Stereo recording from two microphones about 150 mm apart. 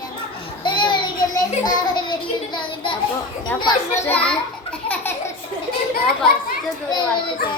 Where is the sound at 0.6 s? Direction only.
30° left (ahead or behind).